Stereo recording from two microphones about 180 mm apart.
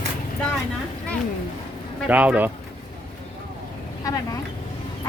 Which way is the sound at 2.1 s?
10° right (ahead or behind).